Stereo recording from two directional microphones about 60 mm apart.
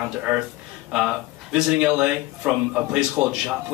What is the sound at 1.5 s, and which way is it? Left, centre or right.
A man's voice, centre.